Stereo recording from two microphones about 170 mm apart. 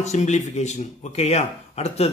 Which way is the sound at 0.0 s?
45° left (ahead or behind).